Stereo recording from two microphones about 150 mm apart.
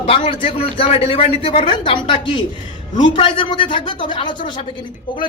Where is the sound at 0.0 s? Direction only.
40° left (ahead or behind).